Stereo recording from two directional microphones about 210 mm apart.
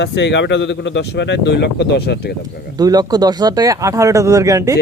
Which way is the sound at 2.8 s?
20° right (ahead or behind).